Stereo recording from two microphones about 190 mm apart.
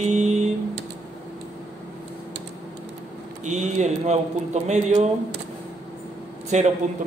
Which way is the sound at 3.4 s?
40° right (ahead or behind).